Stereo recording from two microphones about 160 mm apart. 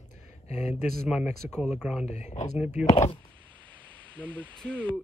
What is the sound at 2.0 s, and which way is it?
Speech, 45° left (ahead or behind).